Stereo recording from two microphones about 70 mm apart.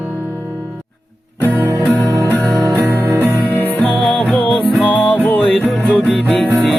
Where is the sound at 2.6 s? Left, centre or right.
Right.